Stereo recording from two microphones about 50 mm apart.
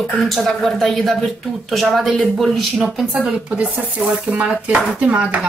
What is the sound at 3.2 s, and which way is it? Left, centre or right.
Speech, right.